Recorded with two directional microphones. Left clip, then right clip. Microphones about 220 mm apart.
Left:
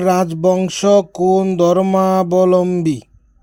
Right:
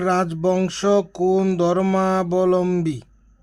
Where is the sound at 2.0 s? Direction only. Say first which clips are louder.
Left 6 dB; 25° left (ahead or behind).